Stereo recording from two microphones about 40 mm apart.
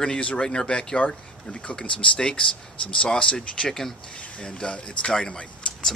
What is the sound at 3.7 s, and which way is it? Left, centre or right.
Speech, centre.